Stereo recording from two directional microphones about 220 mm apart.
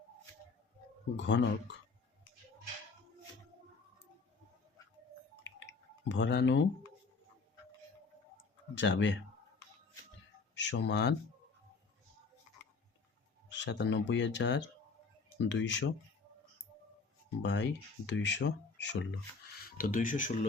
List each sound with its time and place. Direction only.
1.1 s speech: 55° left (ahead or behind)
6.1 s speech: 55° left (ahead or behind)
8.7 s speech: 55° left (ahead or behind)
10.5 s speech: 55° left (ahead or behind)
13.5 s speech: 55° left (ahead or behind)
17.4 s speech: 55° left (ahead or behind)
19.5 s speech: 40° left (ahead or behind)